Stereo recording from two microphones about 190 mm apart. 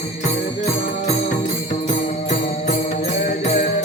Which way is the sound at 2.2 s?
40° left (ahead or behind).